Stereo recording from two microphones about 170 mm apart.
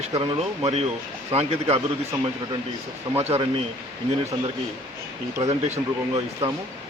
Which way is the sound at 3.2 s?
35° right (ahead or behind).